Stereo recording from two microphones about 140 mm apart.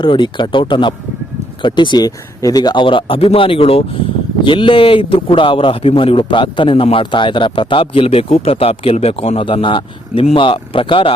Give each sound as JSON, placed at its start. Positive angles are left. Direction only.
{"t": 0.0, "sound": "a man's voice", "side_deg": 35}